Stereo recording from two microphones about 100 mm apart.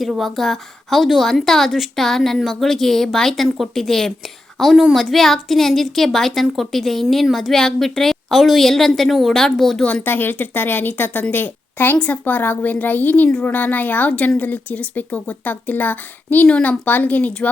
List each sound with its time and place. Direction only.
0.0 s a woman's voice: centre (ahead or behind)
9.8 s a woman's voice: 15° left (ahead or behind)